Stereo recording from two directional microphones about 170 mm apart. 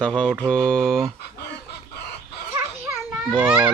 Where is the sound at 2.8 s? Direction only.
20° right (ahead or behind).